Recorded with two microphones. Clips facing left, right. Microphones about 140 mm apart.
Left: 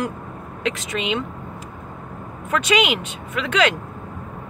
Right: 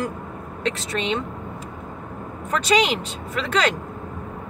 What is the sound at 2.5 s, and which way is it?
Speech, 35° right (ahead or behind).